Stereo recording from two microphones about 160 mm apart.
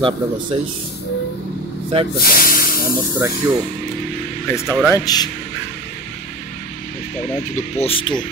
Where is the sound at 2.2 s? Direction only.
65° left (ahead or behind).